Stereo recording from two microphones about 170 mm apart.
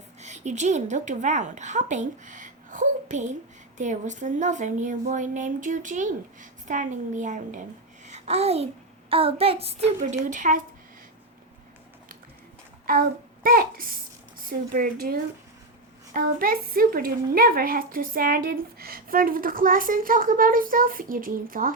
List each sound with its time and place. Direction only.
0.2 s a woman's voice: 45° right (ahead or behind)
8.0 s child singing: 40° right (ahead or behind)
10.2 s speech: 50° right (ahead or behind)
12.8 s child singing: 55° right (ahead or behind)
14.7 s a woman's voice: 55° right (ahead or behind)